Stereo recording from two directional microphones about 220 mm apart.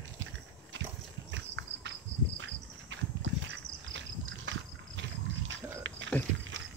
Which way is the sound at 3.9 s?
60° right (ahead or behind).